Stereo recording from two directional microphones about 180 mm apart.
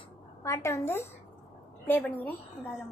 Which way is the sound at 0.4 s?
15° left (ahead or behind).